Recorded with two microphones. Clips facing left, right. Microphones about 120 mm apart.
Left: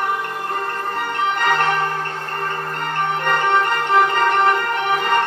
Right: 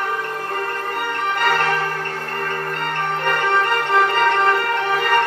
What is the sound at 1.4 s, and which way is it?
Music, 25° left (ahead or behind).